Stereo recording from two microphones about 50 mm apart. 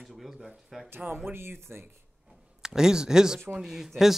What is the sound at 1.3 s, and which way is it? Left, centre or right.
Speech, right.